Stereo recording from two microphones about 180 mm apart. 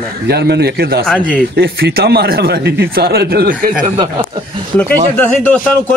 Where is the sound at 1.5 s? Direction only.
60° right (ahead or behind).